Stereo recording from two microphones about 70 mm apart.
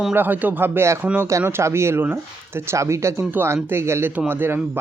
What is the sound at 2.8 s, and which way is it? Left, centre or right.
Speech, right.